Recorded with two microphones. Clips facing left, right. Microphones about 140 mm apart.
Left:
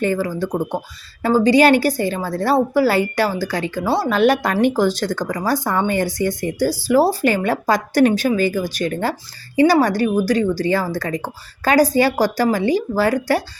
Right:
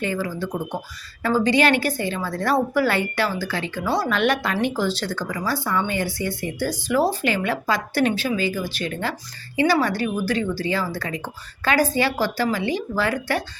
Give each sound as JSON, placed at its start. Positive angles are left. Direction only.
{"t": 0.0, "sound": "a woman's voice", "side_deg": 45}